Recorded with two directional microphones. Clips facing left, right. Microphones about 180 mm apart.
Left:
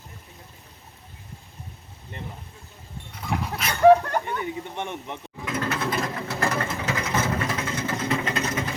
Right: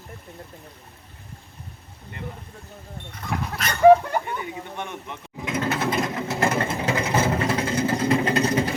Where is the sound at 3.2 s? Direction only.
Centre (ahead or behind).